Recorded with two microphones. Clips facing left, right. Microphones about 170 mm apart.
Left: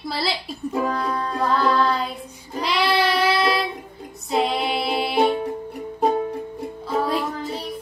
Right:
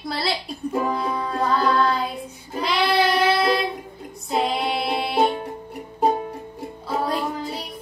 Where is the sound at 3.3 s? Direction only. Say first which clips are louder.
Right 1 dB; 50° right (ahead or behind).